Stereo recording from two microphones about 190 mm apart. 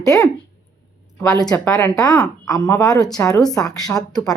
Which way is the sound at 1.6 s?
15° left (ahead or behind).